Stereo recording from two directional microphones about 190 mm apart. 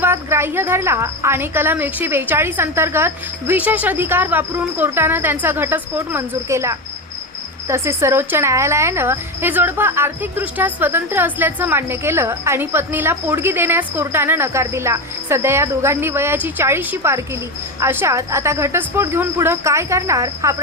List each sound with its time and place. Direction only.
0.0 s a woman's voice: 15° right (ahead or behind)